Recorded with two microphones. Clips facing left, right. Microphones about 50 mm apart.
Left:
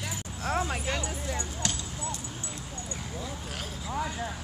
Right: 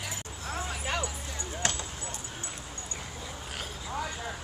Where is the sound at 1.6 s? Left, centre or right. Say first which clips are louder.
Right 4 dB; right.